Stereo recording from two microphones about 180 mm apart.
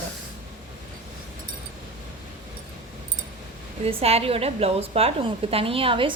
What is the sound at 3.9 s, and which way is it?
A woman's voice, 35° right (ahead or behind).